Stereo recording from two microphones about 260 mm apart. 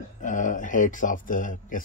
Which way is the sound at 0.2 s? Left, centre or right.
Left.